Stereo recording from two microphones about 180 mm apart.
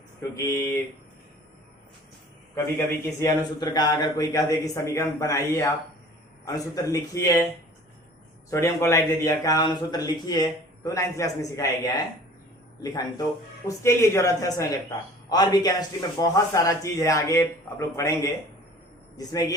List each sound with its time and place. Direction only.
0.2 s speech: 15° left (ahead or behind)
2.7 s speech: 20° left (ahead or behind)
8.4 s a man's voice: 15° left (ahead or behind)